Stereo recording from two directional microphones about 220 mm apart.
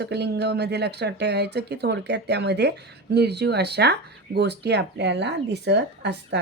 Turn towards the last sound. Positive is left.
turn(degrees=-50)  # may be behind; listen again after turning